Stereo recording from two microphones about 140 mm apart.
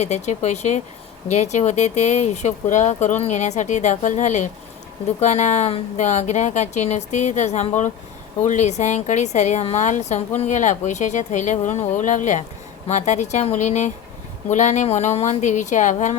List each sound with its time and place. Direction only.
0.0 s speech: 55° left (ahead or behind)